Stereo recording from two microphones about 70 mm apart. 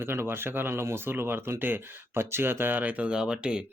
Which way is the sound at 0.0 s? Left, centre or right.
Right.